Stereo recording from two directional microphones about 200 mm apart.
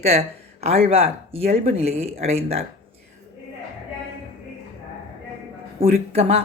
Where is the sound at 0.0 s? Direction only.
30° right (ahead or behind).